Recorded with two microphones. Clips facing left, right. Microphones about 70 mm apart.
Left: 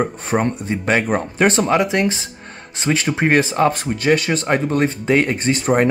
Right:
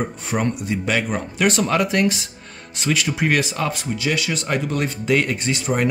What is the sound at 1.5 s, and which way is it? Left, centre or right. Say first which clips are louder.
Speech: left 3 dB; left.